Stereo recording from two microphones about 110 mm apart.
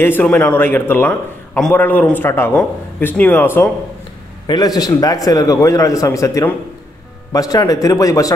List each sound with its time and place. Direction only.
0.0 s a man's voice: 15° left (ahead or behind)
4.5 s a man's voice: 35° left (ahead or behind)